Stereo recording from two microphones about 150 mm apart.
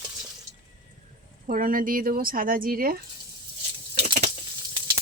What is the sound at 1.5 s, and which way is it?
Speech, 60° right (ahead or behind).